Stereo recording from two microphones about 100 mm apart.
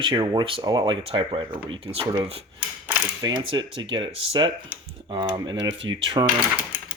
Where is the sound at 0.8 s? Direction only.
60° right (ahead or behind).